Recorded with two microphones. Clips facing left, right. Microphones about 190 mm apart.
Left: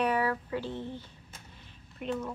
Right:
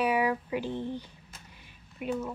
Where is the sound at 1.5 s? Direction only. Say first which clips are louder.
Left 1 dB; 10° right (ahead or behind).